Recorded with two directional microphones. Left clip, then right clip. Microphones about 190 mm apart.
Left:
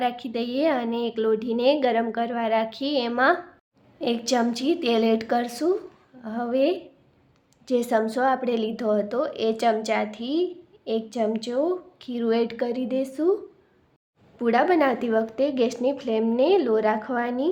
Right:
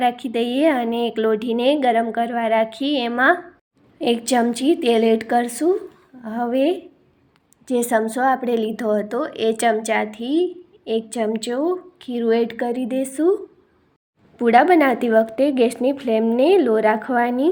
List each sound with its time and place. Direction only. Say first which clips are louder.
0.0 s a woman's voice: right 6 dB; 15° right (ahead or behind)